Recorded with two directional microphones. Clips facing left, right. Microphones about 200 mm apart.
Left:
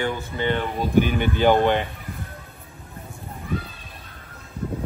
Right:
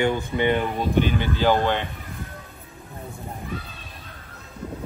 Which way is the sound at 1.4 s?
20° left (ahead or behind).